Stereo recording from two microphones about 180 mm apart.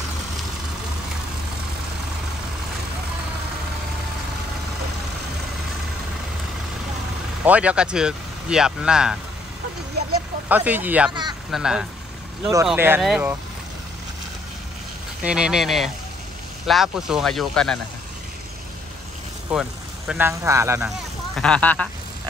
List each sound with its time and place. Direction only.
7.4 s speech: 5° right (ahead or behind)
10.5 s speech: 10° right (ahead or behind)
11.1 s speech: 25° right (ahead or behind)
11.5 s speech: 5° right (ahead or behind)
15.2 s speech: 5° right (ahead or behind)
20.1 s speech: 15° right (ahead or behind)
21.4 s speech: 5° left (ahead or behind)